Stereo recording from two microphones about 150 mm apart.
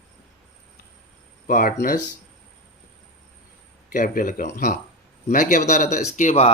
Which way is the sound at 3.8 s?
65° left (ahead or behind).